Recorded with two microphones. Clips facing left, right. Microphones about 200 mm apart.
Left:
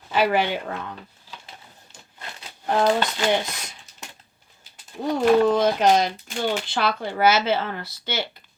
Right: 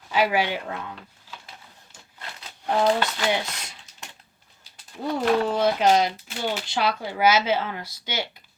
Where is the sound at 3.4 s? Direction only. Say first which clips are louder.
Left 2 dB; 10° left (ahead or behind).